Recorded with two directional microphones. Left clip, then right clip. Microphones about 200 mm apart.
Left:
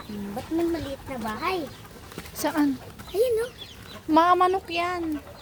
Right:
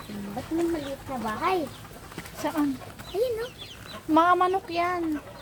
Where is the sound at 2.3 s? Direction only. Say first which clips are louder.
Left 3 dB; 45° left (ahead or behind).